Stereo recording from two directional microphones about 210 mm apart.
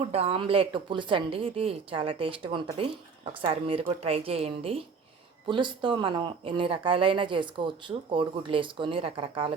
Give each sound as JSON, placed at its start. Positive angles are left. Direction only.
{"t": 0.0, "sound": "speech", "side_deg": -30}